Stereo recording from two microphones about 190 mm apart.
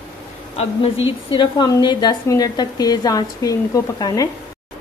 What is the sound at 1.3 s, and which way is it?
A woman's voice, 25° left (ahead or behind).